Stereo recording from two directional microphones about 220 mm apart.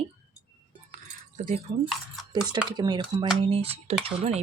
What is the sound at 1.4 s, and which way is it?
Speech, 30° right (ahead or behind).